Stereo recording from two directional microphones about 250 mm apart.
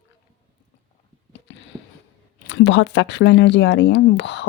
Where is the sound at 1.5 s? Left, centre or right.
Left.